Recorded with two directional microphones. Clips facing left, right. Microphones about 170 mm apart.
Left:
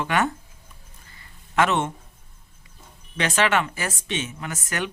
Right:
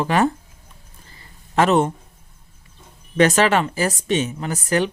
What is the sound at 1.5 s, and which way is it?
Speech, 35° right (ahead or behind).